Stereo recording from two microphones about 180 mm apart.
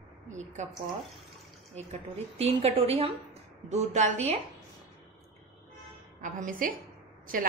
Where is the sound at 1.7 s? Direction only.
35° right (ahead or behind).